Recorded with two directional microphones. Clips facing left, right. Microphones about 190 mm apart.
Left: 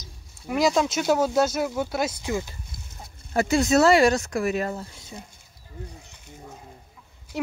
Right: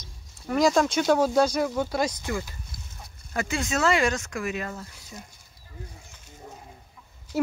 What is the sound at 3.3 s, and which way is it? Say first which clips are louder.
Speech: left 8 dB; 40° left (ahead or behind).